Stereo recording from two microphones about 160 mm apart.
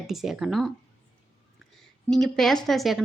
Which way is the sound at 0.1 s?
Centre (ahead or behind).